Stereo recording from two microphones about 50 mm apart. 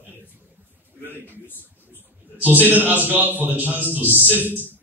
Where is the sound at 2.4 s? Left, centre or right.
Right.